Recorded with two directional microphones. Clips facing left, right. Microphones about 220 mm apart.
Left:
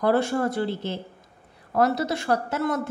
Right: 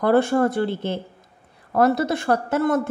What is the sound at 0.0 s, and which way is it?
A man's voice, 55° right (ahead or behind).